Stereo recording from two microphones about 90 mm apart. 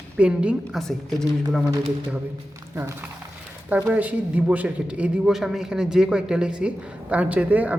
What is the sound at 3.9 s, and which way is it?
A man's voice, 15° right (ahead or behind).